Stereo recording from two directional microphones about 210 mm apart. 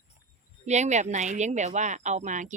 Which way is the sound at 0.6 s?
35° right (ahead or behind).